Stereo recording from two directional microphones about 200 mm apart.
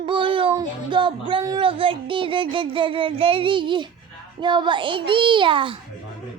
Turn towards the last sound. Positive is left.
turn(degrees=-25)  # may be behind; listen again after turning